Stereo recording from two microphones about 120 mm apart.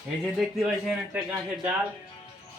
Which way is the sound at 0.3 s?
5° right (ahead or behind).